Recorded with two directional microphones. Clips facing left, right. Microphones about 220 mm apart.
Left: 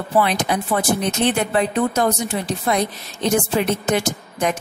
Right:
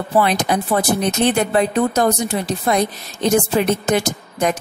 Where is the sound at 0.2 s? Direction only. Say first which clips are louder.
Right 2 dB; 40° right (ahead or behind).